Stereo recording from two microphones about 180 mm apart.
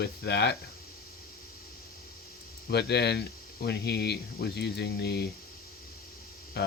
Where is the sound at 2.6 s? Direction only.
65° left (ahead or behind).